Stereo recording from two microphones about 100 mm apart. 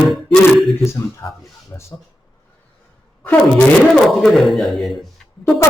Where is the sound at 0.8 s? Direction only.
30° left (ahead or behind).